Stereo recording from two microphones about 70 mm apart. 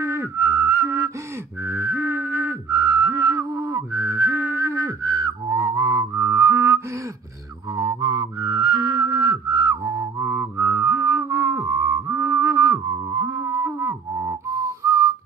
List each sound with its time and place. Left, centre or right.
0.0 s whistling: right
1.6 s a sound: right
2.7 s whistling: right
5.0 s a sound: right
5.5 s music: right
7.7 s music: right
13.1 s music: right
13.4 s music: right
13.7 s music: right